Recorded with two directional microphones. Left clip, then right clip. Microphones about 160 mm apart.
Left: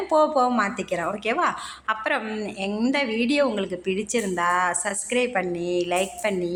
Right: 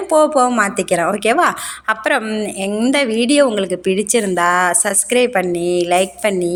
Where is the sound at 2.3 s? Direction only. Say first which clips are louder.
Right 8 dB; 20° right (ahead or behind).